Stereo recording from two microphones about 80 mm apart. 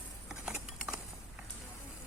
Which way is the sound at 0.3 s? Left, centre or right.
Centre.